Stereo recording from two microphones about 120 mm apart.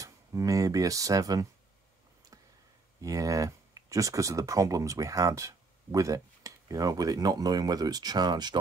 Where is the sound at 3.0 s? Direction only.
25° right (ahead or behind).